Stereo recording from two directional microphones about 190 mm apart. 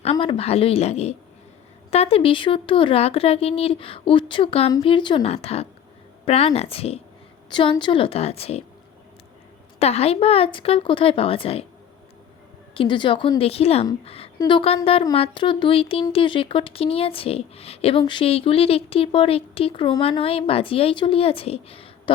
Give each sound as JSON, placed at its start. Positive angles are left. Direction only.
{"t": 0.0, "sound": "a woman's voice", "side_deg": 30}
{"t": 9.7, "sound": "speech", "side_deg": 35}
{"t": 12.7, "sound": "a woman's voice", "side_deg": 25}